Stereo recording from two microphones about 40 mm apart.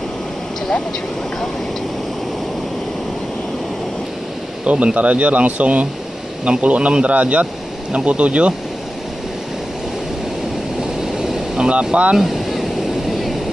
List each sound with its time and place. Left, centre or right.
4.6 s speech: right
11.1 s vehicle: centre
11.9 s speech: right
12.2 s a sound: centre